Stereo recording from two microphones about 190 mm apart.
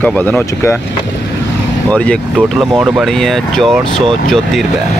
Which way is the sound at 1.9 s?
5° left (ahead or behind).